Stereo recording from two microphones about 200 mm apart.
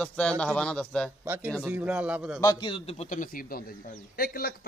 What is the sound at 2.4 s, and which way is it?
A man's voice, 20° left (ahead or behind).